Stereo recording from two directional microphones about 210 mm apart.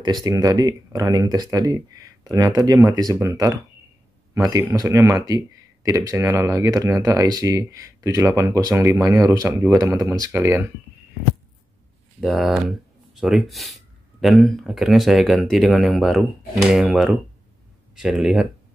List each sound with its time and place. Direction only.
0.0 s speech: 20° right (ahead or behind)
12.2 s speech: centre (ahead or behind)